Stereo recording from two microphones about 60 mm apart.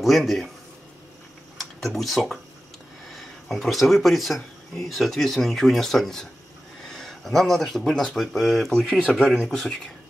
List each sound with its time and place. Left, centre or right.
0.0 s speech: centre
1.6 s speech: centre